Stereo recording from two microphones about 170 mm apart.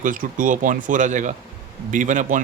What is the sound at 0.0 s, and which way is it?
Speech, 50° right (ahead or behind).